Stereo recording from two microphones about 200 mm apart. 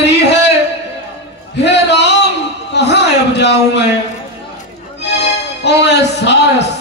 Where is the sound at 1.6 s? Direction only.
60° left (ahead or behind).